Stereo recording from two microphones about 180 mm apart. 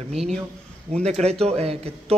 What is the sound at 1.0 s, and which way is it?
Speech, 35° right (ahead or behind).